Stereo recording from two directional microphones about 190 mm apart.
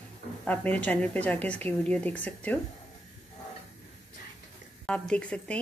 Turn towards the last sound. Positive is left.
turn(degrees=5)  # may be behind; listen again after turning